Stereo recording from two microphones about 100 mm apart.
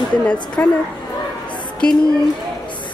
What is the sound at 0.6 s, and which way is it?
Speech, 20° left (ahead or behind).